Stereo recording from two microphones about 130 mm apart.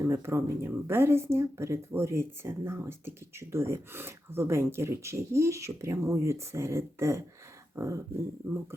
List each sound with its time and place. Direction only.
0.0 s speech: 20° right (ahead or behind)